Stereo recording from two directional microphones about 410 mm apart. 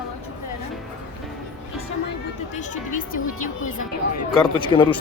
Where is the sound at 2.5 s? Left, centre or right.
Centre.